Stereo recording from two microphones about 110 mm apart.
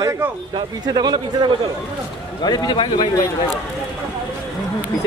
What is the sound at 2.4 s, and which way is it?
Speech, 40° left (ahead or behind).